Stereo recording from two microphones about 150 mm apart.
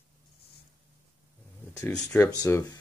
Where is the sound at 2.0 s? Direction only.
20° left (ahead or behind).